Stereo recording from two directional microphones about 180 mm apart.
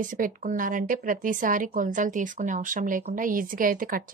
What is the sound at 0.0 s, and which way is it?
Speech, 45° right (ahead or behind).